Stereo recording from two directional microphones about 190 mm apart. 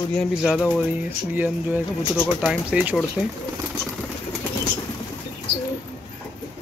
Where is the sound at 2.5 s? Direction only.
5° right (ahead or behind).